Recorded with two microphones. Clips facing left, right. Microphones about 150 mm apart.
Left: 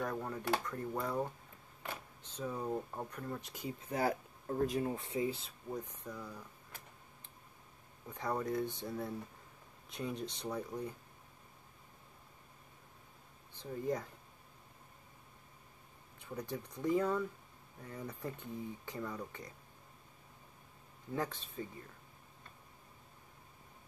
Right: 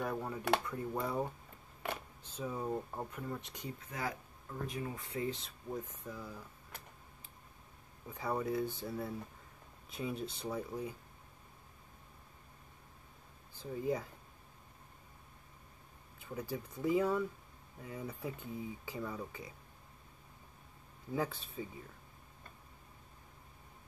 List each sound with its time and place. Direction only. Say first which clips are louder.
0.0 s speech: right 1 dB; 5° right (ahead or behind)
3.8 s speech: left 8 dB; 35° left (ahead or behind)
4.9 s speech: left 3 dB; 25° left (ahead or behind)
5.2 s speech: left 2 dB; 5° left (ahead or behind)
8.1 s speech: right 1 dB; 5° right (ahead or behind)
13.6 s speech: right 1 dB; 5° right (ahead or behind)
16.2 s speech: right 1 dB; 5° right (ahead or behind)
21.1 s speech: right 2 dB; 5° right (ahead or behind)